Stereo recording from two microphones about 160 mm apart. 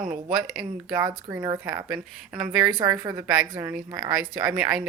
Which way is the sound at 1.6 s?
5° right (ahead or behind).